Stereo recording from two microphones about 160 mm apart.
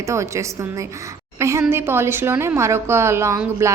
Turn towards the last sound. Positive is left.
turn(degrees=-15)  # may be behind; listen again after turning